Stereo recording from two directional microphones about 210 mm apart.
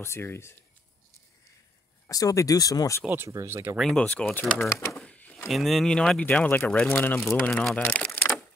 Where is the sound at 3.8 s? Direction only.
5° left (ahead or behind).